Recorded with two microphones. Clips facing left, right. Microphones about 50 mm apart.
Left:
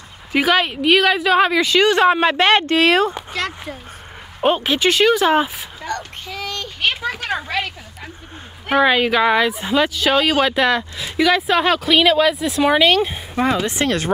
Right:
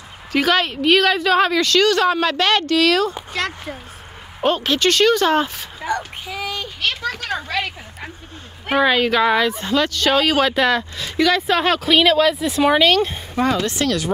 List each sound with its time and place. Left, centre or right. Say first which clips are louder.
0.3 s speech: left 1 dB; centre; by 3.2 s left
3.2 s speech: even; centre
4.4 s speech: left 1 dB; centre
5.8 s child singing: right 4 dB; centre
6.8 s speech: left 3 dB; centre
8.8 s speech: even; centre
13.7 s speech: left 1 dB; left